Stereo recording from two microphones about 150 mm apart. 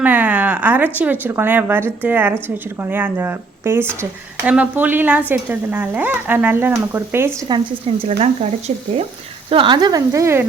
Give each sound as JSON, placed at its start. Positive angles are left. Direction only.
{"t": 0.0, "sound": "speech", "side_deg": -10}
{"t": 7.9, "sound": "speech", "side_deg": -40}